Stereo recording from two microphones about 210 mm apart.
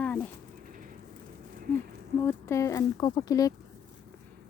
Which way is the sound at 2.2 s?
15° left (ahead or behind).